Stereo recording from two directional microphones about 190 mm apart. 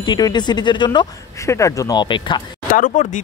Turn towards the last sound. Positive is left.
turn(degrees=40)  # may be behind; listen again after turning